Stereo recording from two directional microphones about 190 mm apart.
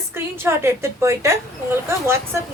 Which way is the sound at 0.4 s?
15° right (ahead or behind).